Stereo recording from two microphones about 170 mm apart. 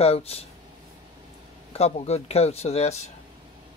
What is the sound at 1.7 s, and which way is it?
Speech, 40° left (ahead or behind).